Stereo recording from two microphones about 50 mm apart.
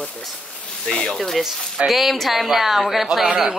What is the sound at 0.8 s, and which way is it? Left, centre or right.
Speech, centre.